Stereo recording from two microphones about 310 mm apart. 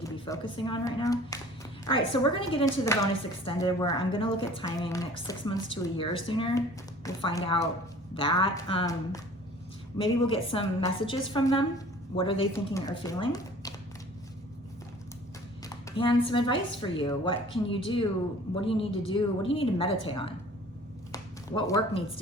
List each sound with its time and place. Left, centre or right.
0.5 s speech: centre
16.0 s speech: centre
21.1 s a sound: centre